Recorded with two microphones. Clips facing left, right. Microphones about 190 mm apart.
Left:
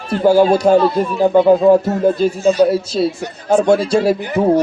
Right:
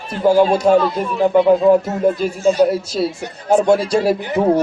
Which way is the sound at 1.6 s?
30° left (ahead or behind).